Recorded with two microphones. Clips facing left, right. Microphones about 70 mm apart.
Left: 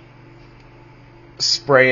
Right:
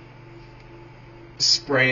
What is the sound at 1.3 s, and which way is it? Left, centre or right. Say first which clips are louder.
Speech: left 8 dB; left.